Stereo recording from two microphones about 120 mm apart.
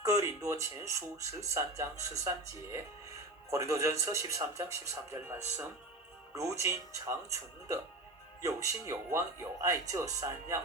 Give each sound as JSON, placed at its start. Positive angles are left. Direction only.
{"t": 0.0, "sound": "speech", "side_deg": -25}
{"t": 8.4, "sound": "speech", "side_deg": -25}